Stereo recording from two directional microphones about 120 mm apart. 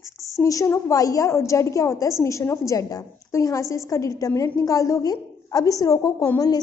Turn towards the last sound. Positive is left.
turn(degrees=30)  # may be behind; listen again after turning